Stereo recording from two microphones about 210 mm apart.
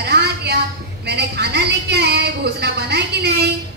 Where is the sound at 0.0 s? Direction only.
50° right (ahead or behind).